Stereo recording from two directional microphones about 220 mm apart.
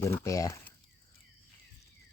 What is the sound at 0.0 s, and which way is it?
Speech, 15° left (ahead or behind).